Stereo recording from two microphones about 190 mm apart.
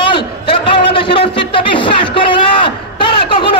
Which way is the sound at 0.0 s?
25° left (ahead or behind).